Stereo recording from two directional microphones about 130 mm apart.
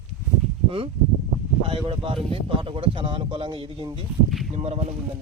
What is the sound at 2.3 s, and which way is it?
Speech, 45° right (ahead or behind).